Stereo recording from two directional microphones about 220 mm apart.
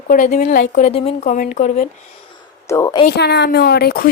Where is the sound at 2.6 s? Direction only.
15° left (ahead or behind).